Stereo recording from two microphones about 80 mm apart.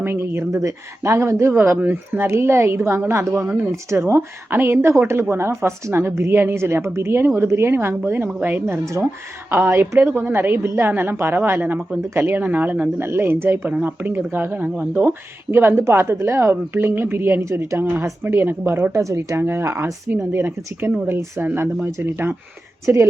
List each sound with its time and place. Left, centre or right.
0.0 s a woman's voice: right
8.8 s a woman's voice: right
9.5 s a woman's voice: right
13.7 s a woman's voice: centre
18.9 s a woman's voice: right
19.4 s a woman's voice: right